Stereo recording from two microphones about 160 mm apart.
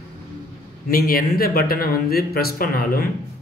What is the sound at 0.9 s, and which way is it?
A man's voice, 65° left (ahead or behind).